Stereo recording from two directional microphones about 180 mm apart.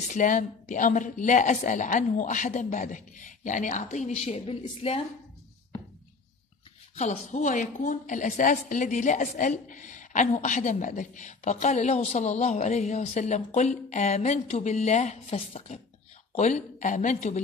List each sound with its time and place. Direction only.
0.1 s a woman's voice: 45° left (ahead or behind)
7.0 s a woman's voice: 40° left (ahead or behind)